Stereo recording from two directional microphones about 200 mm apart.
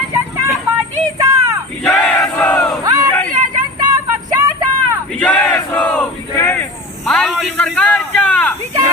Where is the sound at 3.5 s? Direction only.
20° right (ahead or behind).